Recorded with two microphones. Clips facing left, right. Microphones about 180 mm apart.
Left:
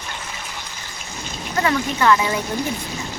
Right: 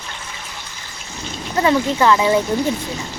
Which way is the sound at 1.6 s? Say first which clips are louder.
Right 4 dB; 25° right (ahead or behind).